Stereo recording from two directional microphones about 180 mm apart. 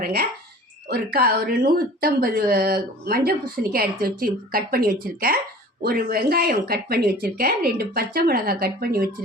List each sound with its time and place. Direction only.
0.0 s speech: 55° right (ahead or behind)